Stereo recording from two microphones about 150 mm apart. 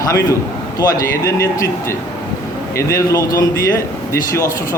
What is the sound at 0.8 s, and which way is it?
Speech, 20° left (ahead or behind).